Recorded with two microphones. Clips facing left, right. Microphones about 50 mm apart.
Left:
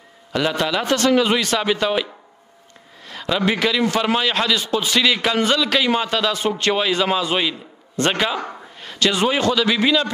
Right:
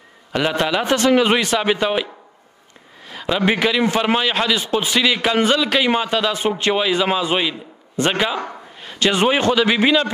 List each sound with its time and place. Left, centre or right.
0.3 s a man's voice: right
3.1 s a sound: centre
3.4 s a man's voice: right
4.9 s a man's voice: centre
8.4 s a sound: centre
9.0 s a man's voice: right